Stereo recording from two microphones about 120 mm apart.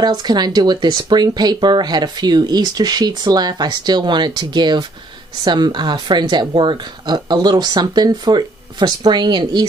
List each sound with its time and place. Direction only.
0.0 s speech: 35° right (ahead or behind)